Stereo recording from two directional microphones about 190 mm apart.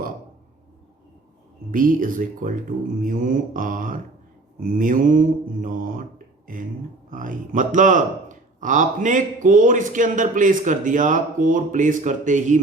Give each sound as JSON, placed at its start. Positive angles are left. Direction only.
{"t": 1.7, "sound": "speech", "side_deg": -45}